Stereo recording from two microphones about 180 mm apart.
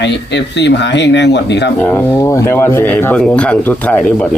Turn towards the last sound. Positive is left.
turn(degrees=5)  # may be behind; listen again after turning